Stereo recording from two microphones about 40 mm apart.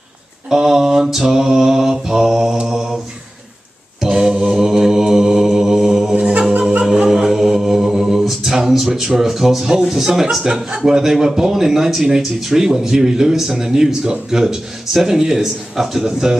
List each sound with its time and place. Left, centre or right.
0.5 s mantra: centre
4.0 s mantra: centre
6.1 s a capella: right
6.9 s a capella: centre
9.7 s mantra: centre